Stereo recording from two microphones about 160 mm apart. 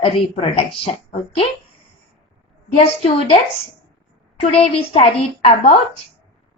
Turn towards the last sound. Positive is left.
turn(degrees=40)  # may be behind; listen again after turning